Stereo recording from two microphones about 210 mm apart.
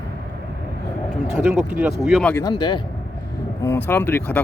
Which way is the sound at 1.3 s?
5° right (ahead or behind).